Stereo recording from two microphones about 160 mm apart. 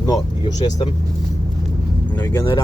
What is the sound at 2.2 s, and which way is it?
Speech, 15° left (ahead or behind).